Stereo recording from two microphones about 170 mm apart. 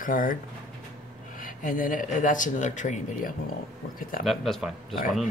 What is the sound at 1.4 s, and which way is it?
Speech, 55° left (ahead or behind).